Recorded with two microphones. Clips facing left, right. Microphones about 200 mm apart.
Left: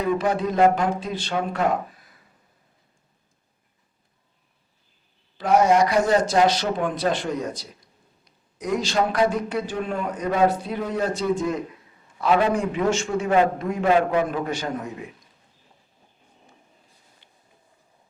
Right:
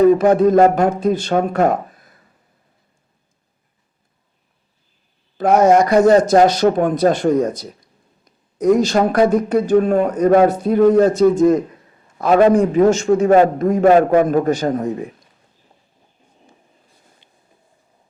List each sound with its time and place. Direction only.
0.0 s speech: 45° right (ahead or behind)
5.4 s a man's voice: 45° right (ahead or behind)